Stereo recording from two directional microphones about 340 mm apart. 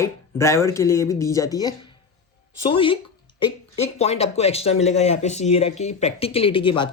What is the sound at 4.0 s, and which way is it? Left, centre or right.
Speech, centre.